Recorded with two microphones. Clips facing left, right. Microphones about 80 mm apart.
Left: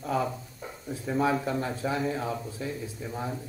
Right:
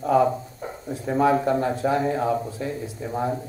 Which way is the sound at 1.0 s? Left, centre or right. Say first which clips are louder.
Right 7 dB; right.